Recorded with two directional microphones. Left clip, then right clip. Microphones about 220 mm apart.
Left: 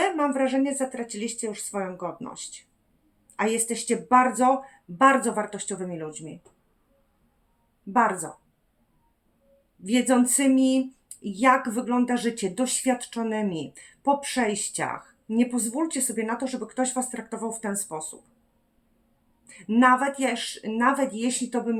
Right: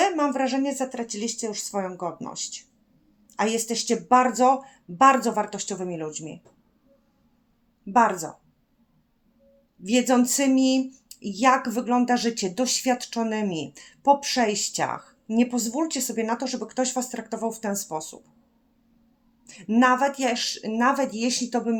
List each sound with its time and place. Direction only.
0.0 s speech: 30° right (ahead or behind)
7.9 s speech: 30° right (ahead or behind)
9.8 s speech: 30° right (ahead or behind)
19.5 s speech: 30° right (ahead or behind)